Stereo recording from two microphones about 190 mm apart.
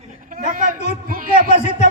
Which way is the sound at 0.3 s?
45° right (ahead or behind).